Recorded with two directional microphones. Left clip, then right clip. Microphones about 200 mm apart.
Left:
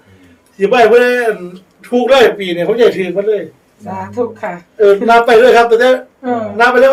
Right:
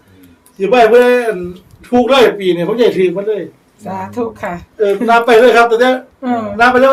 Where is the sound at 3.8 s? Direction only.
50° right (ahead or behind).